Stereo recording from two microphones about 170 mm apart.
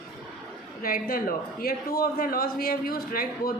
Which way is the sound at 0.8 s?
60° left (ahead or behind).